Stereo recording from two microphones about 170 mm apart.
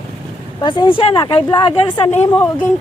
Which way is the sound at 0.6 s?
25° left (ahead or behind).